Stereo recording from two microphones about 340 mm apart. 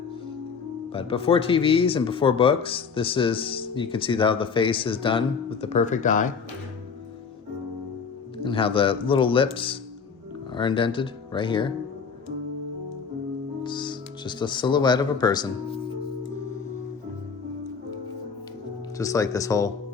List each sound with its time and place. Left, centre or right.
0.9 s speech: centre
8.4 s speech: centre
13.6 s speech: centre
18.9 s speech: centre